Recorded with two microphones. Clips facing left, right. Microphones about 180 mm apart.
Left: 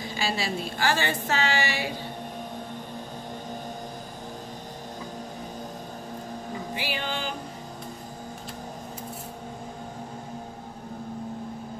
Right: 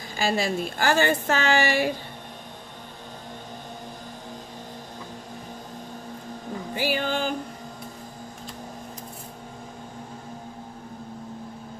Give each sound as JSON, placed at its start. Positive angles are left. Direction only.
{"t": 0.2, "sound": "speech", "side_deg": -50}
{"t": 6.7, "sound": "music", "side_deg": -45}